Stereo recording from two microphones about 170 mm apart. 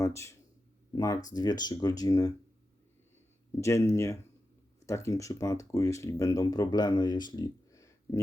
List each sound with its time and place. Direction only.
0.0 s speech: 15° left (ahead or behind)
3.6 s speech: 15° left (ahead or behind)